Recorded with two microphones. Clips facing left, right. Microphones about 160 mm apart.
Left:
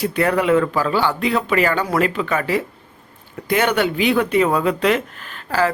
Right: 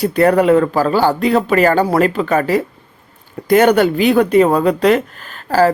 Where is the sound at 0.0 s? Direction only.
40° right (ahead or behind).